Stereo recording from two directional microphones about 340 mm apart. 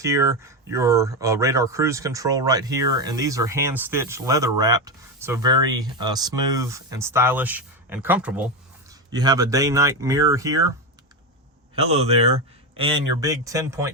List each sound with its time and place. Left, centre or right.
0.0 s speech: centre
11.7 s speech: centre